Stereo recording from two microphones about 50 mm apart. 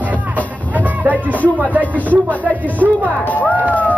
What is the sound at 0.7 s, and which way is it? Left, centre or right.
Music, right.